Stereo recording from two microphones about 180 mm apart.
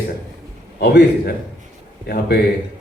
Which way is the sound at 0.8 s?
60° left (ahead or behind).